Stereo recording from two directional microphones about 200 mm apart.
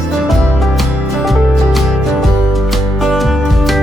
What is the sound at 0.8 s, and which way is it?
Music, centre (ahead or behind).